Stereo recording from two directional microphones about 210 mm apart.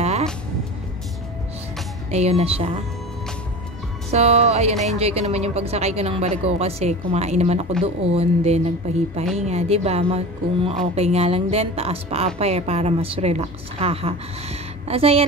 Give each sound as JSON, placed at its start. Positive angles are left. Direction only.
{"t": 0.0, "sound": "music", "side_deg": -30}
{"t": 2.0, "sound": "a woman's voice", "side_deg": -30}
{"t": 4.1, "sound": "a woman's voice", "side_deg": -30}